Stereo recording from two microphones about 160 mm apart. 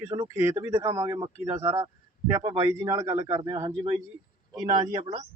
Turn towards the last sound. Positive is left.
turn(degrees=-25)  # may be behind; listen again after turning